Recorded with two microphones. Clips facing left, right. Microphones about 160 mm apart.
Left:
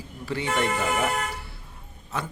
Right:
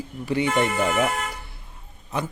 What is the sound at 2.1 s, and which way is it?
Speech, 15° right (ahead or behind).